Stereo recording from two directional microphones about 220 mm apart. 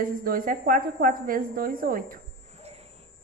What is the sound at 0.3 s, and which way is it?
Speech, 40° right (ahead or behind).